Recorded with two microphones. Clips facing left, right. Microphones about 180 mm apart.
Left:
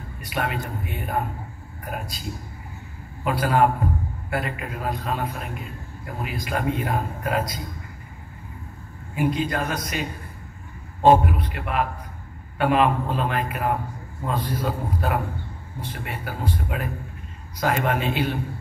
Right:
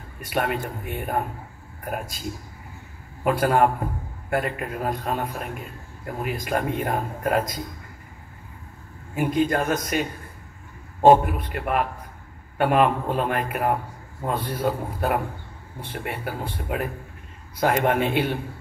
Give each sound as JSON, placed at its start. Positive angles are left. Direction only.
{"t": 0.2, "sound": "a man's voice", "side_deg": -50}
{"t": 3.3, "sound": "a man's voice", "side_deg": -50}
{"t": 9.1, "sound": "a man's voice", "side_deg": -45}